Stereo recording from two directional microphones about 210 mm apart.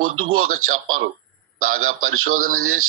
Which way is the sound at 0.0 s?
90° right.